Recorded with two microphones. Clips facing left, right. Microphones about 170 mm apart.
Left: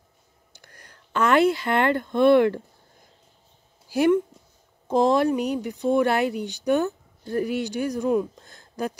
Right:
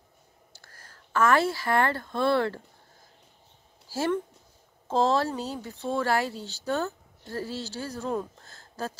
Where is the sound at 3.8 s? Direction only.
20° left (ahead or behind).